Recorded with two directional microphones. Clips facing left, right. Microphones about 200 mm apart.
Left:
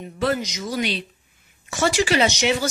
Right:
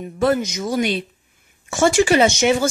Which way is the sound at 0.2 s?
50° right (ahead or behind).